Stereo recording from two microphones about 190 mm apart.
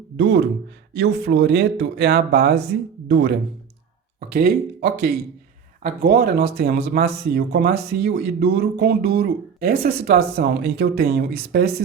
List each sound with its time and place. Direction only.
0.2 s speech: 65° right (ahead or behind)
4.3 s speech: 50° right (ahead or behind)